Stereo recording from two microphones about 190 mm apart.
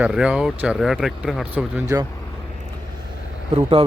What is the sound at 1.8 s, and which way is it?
Speech, 15° right (ahead or behind).